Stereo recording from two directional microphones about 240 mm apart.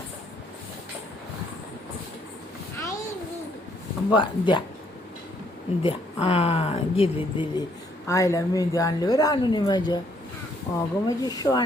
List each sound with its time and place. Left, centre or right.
4.1 s speech: centre
5.8 s a woman's voice: left